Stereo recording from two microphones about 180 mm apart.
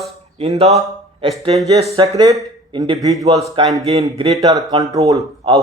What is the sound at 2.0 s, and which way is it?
Speech, 20° right (ahead or behind).